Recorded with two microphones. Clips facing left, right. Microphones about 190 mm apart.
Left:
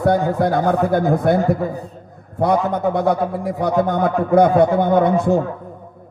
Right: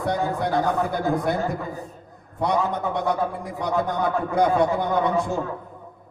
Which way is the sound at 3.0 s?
55° left (ahead or behind).